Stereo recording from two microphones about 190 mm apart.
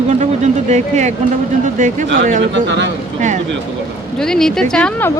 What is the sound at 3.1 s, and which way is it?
Speech, 40° right (ahead or behind).